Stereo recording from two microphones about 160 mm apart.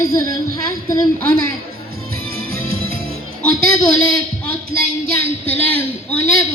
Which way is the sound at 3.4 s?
5° left (ahead or behind).